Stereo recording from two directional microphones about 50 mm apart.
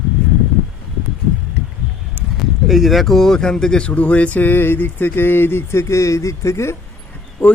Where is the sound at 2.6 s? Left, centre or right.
Centre; by 6.7 s left.